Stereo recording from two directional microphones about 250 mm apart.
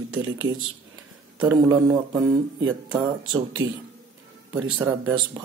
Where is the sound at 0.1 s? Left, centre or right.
Right.